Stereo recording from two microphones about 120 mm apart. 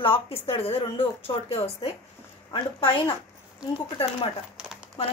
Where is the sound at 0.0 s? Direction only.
50° left (ahead or behind).